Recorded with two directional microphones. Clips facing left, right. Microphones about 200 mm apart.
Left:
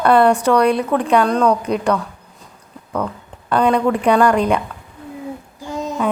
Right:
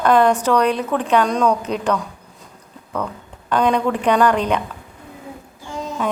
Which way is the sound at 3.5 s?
10° left (ahead or behind).